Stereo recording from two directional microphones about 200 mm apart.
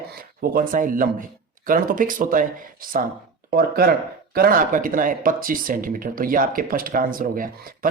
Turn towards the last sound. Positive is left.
turn(degrees=-45)  # may be behind; listen again after turning